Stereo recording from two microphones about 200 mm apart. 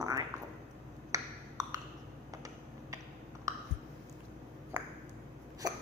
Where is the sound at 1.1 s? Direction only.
15° right (ahead or behind).